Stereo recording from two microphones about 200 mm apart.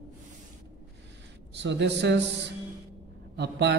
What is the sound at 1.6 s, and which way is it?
A man's voice, 60° right (ahead or behind).